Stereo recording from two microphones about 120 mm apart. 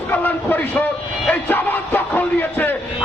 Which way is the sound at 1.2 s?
15° left (ahead or behind).